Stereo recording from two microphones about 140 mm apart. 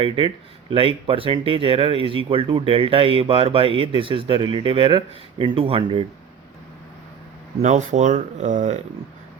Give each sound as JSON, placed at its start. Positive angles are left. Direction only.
{"t": 0.7, "sound": "speech", "side_deg": -40}
{"t": 7.6, "sound": "speech", "side_deg": -60}